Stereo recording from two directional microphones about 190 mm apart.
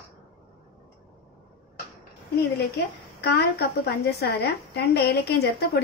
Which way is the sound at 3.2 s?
60° left (ahead or behind).